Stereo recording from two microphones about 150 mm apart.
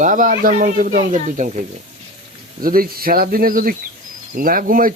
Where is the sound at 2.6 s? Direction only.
75° right (ahead or behind).